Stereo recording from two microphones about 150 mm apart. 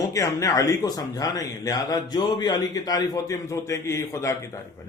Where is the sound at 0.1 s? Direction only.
20° left (ahead or behind).